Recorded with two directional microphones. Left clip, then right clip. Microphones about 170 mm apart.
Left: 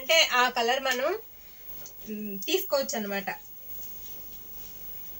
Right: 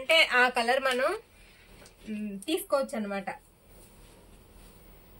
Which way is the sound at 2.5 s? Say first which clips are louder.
Left 1 dB; 5° left (ahead or behind).